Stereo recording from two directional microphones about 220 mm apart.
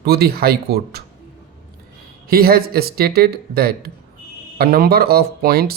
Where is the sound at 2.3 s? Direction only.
45° right (ahead or behind).